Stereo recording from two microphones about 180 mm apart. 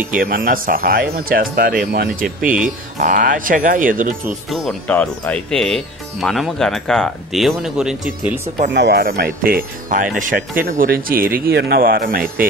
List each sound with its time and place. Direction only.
0.1 s speech: 50° right (ahead or behind)
4.5 s speech: 5° left (ahead or behind)
8.6 s speech: 70° right (ahead or behind); by 12.4 s 55° right (ahead or behind)